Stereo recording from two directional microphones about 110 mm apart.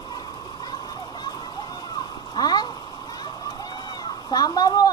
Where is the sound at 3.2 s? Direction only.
40° left (ahead or behind).